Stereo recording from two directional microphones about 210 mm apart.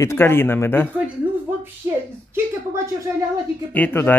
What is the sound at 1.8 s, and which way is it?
Speech, 15° right (ahead or behind).